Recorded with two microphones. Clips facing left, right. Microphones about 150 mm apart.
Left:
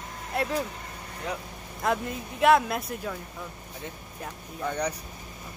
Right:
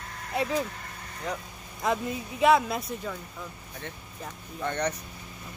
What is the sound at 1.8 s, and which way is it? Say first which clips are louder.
Speech: even; centre (ahead or behind).